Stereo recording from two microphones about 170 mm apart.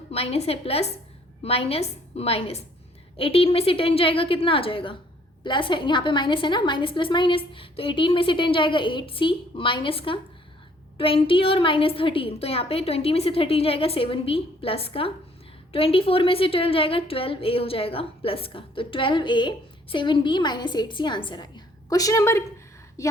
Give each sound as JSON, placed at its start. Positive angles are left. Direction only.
{"t": 0.1, "sound": "a woman's voice", "side_deg": 35}